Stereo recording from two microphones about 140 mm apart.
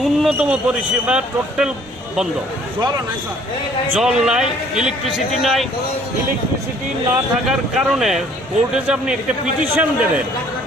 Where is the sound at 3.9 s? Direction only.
5° right (ahead or behind).